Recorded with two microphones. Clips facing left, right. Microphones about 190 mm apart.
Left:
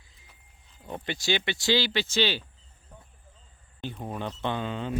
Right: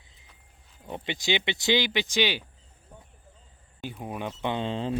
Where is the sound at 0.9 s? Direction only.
20° right (ahead or behind).